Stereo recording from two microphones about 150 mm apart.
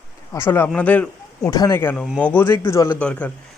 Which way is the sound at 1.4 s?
25° left (ahead or behind).